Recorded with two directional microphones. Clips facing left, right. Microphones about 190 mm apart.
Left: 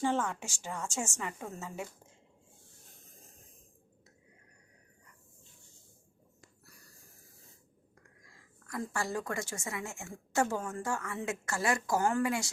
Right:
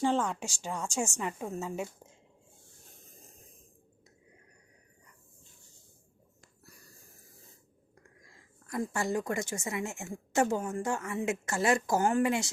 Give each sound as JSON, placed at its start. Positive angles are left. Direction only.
{"t": 0.0, "sound": "a woman's voice", "side_deg": -15}
{"t": 8.6, "sound": "a woman's voice", "side_deg": -20}